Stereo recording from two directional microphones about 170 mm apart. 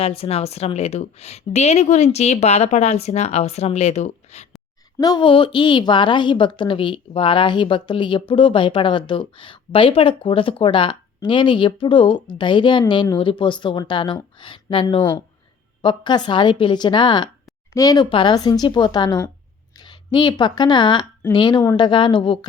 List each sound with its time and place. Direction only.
0.0 s a woman's voice: 35° left (ahead or behind)
4.9 s a woman's voice: 25° left (ahead or behind)